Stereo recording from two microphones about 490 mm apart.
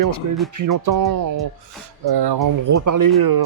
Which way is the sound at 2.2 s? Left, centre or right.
Right.